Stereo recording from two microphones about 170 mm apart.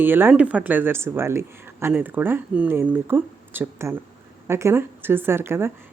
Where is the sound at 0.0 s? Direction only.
10° right (ahead or behind).